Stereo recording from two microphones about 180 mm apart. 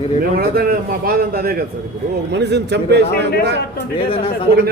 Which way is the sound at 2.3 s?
70° right (ahead or behind).